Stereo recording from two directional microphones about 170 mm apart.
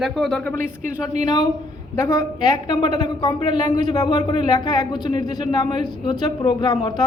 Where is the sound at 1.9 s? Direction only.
20° left (ahead or behind).